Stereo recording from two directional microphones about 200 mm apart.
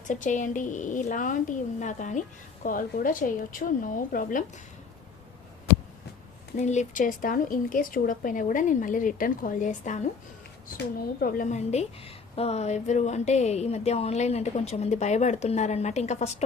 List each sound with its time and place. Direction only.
0.1 s a woman's voice: 40° left (ahead or behind)
6.6 s a woman's voice: 35° left (ahead or behind)
11.2 s a woman's voice: 45° left (ahead or behind)